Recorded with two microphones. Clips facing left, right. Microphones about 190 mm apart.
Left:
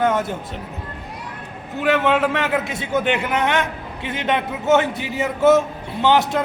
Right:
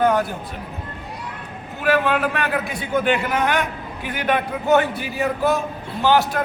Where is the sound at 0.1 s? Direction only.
20° left (ahead or behind).